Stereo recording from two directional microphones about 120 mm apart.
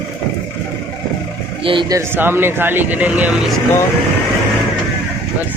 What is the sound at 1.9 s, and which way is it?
Speech, 25° right (ahead or behind).